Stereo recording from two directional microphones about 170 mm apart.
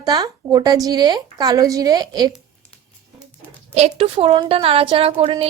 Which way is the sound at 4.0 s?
35° right (ahead or behind).